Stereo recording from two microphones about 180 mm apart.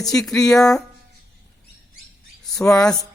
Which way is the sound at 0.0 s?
Centre (ahead or behind).